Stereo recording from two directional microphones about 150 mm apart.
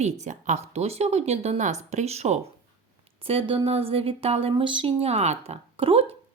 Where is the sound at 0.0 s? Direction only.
50° right (ahead or behind).